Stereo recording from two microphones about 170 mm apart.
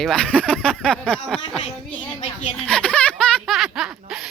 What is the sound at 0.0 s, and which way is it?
Laughter, 5° left (ahead or behind).